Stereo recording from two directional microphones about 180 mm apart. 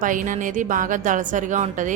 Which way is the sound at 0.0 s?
45° right (ahead or behind).